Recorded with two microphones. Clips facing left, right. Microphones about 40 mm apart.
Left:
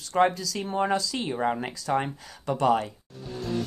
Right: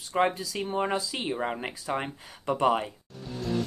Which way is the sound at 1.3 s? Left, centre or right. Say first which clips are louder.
Left 5 dB; centre.